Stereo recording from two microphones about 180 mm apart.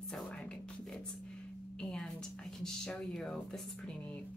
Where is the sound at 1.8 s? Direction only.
5° left (ahead or behind).